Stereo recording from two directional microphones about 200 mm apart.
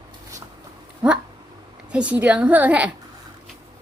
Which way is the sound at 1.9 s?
5° right (ahead or behind).